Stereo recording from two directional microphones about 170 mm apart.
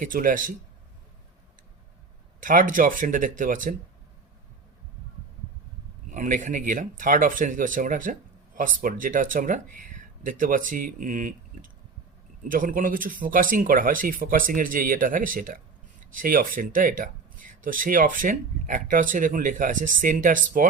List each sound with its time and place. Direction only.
0.0 s speech: 55° right (ahead or behind)
2.4 s speech: 50° right (ahead or behind)
6.1 s speech: 50° right (ahead or behind)